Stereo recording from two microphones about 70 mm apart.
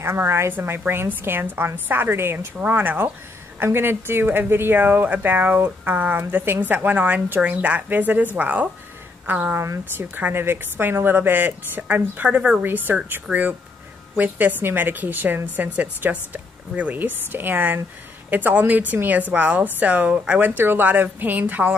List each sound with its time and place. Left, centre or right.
0.0 s a woman's voice: right
9.6 s speech: right